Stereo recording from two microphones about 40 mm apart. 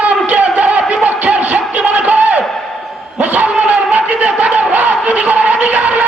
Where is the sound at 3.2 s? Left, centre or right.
Right.